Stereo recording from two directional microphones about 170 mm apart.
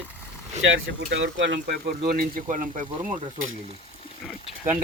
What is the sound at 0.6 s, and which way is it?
Speech, 90° right.